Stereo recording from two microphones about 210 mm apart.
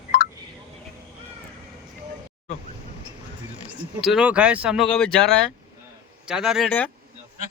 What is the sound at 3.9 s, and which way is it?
Speech, centre (ahead or behind).